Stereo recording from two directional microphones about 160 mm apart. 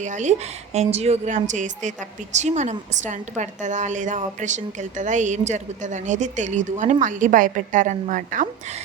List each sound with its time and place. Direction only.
0.0 s a woman's voice: 50° right (ahead or behind)